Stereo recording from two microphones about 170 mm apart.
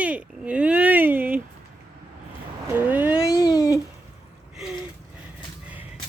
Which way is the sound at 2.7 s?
10° right (ahead or behind).